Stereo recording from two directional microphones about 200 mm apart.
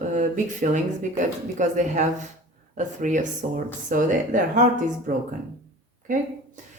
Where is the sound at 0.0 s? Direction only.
40° right (ahead or behind).